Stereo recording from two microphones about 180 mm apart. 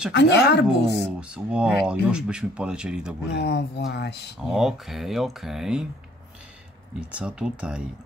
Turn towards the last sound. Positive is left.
turn(degrees=-5)  # may be behind; listen again after turning